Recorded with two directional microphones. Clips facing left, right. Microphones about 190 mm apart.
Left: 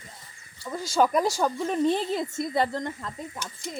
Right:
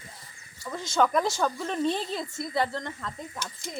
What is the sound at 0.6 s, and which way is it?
Speech, 10° left (ahead or behind).